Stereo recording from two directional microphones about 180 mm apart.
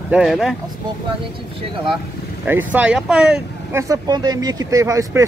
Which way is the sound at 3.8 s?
20° right (ahead or behind).